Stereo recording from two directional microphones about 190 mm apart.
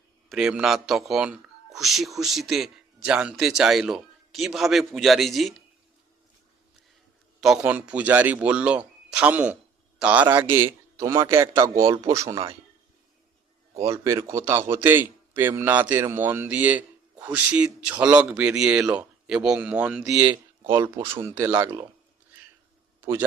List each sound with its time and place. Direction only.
0.3 s a man's voice: 5° right (ahead or behind)
7.4 s a man's voice: 5° right (ahead or behind)
13.8 s a man's voice: 15° right (ahead or behind)
23.0 s a sound: 10° right (ahead or behind)